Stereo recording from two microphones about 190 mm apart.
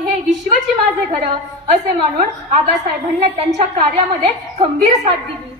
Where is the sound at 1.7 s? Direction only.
45° right (ahead or behind).